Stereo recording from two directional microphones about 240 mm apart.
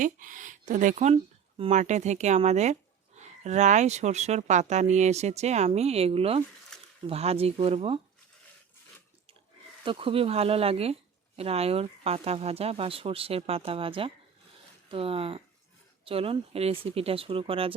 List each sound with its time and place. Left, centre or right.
0.0 s speech: right
6.7 s a sound: centre
7.1 s speech: right
9.8 s speech: right